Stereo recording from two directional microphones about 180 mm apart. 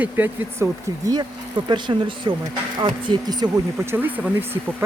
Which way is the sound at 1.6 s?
25° right (ahead or behind).